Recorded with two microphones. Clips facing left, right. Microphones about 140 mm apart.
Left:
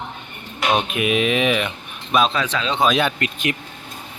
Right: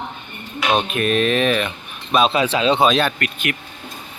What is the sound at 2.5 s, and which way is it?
Speech, 15° right (ahead or behind).